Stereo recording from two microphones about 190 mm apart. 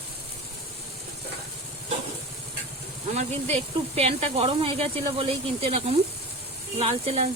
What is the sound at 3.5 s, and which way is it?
Speech, 30° right (ahead or behind).